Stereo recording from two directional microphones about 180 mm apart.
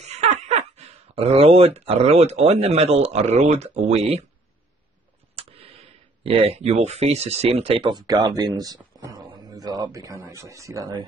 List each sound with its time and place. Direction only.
0.0 s speech: 35° right (ahead or behind)
5.3 s speech: 30° right (ahead or behind)